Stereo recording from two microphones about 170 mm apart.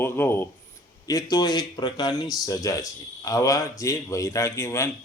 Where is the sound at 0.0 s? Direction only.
15° left (ahead or behind).